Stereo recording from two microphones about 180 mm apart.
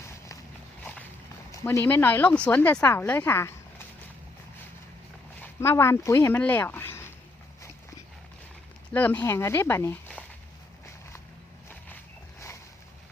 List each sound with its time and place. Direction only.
0.0 s walk: 15° left (ahead or behind)
1.6 s a woman's voice: 10° left (ahead or behind)
5.4 s speech: 15° left (ahead or behind)
8.9 s a woman's voice: 10° left (ahead or behind)